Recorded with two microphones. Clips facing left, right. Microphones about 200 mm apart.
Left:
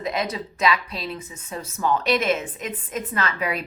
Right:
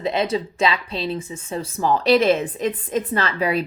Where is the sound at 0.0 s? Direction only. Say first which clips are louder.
Right 5 dB; 30° right (ahead or behind).